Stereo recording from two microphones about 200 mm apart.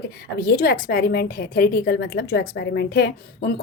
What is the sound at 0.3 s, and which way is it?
A woman's voice, 50° left (ahead or behind).